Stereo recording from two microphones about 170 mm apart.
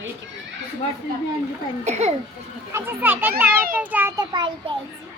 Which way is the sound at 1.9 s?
40° right (ahead or behind).